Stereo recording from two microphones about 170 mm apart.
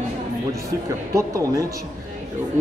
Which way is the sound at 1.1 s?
20° right (ahead or behind).